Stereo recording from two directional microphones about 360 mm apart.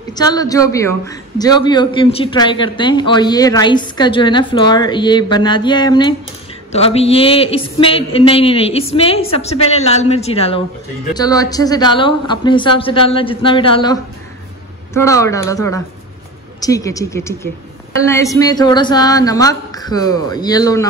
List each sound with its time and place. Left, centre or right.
0.1 s a man's voice: centre
15.0 s a man's voice: centre